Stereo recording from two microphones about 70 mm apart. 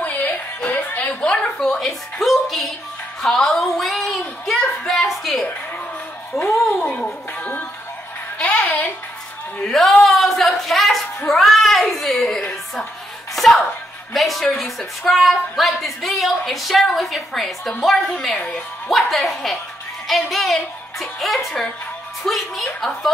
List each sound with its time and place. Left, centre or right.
0.0 s music: left
1.2 s a woman's voice: centre
6.9 s speech: left
8.4 s music: centre
9.6 s speech: centre
13.4 s music: centre
14.1 s a woman's voice: centre